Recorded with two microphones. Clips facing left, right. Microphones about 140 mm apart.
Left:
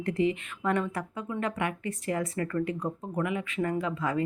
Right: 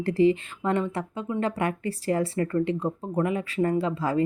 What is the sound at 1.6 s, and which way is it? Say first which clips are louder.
Speech: right 4 dB; 35° right (ahead or behind).